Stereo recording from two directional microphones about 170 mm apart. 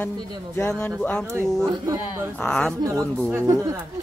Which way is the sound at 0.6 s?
10° left (ahead or behind).